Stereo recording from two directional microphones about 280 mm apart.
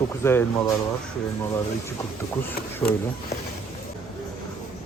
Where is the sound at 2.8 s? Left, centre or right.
Centre.